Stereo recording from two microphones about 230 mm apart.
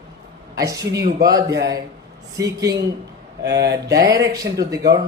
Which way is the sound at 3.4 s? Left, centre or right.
Right.